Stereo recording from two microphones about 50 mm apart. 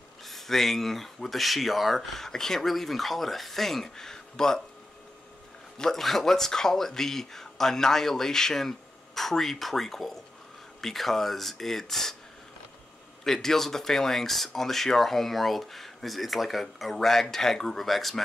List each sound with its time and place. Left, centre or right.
0.2 s speech: centre
5.8 s speech: centre
13.2 s speech: centre